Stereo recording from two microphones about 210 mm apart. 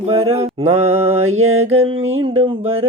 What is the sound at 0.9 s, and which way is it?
Mantra, 80° right.